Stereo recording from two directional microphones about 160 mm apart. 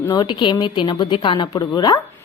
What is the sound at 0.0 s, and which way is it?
A woman's voice, 25° left (ahead or behind).